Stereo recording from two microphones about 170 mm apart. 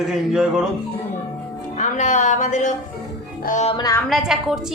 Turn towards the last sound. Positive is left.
turn(degrees=0)  # may be behind; listen again after turning